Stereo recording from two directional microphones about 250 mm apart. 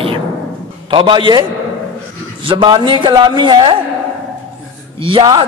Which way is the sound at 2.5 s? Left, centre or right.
Centre.